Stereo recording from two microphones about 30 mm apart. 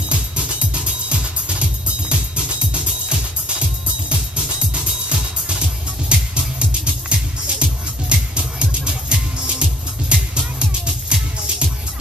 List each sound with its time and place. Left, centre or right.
0.1 s music: right